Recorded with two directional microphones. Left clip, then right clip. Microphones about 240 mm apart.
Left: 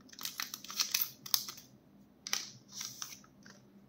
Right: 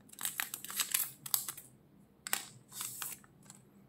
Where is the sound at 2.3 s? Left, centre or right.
Centre.